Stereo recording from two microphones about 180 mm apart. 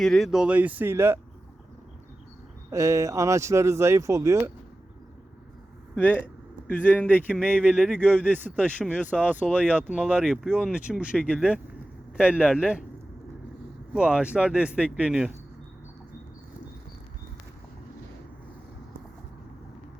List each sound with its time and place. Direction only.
0.0 s speech: centre (ahead or behind)
2.6 s speech: 15° right (ahead or behind)
6.0 s speech: 10° left (ahead or behind)
9.9 s speech: 5° right (ahead or behind)
11.2 s speech: 5° left (ahead or behind)
12.1 s speech: 5° right (ahead or behind)
13.9 s speech: 5° right (ahead or behind)